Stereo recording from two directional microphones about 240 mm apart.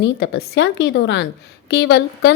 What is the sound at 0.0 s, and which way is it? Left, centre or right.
A woman's voice, left.